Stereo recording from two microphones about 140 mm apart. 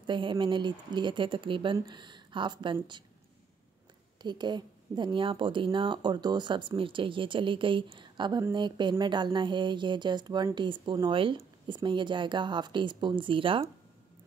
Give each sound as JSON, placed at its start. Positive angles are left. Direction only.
{"t": 0.0, "sound": "speech", "side_deg": -35}
{"t": 4.2, "sound": "speech", "side_deg": -30}